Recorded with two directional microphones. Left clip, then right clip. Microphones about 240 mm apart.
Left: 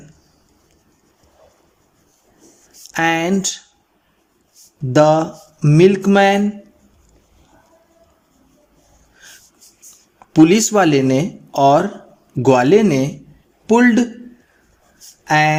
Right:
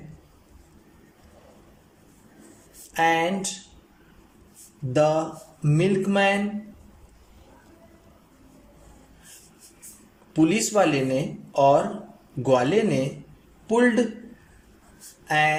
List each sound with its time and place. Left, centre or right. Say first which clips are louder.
2.9 s speech: left 4 dB; left
4.9 s speech: left 9 dB; left
10.3 s speech: left 9 dB; left
15.3 s speech: left 7 dB; left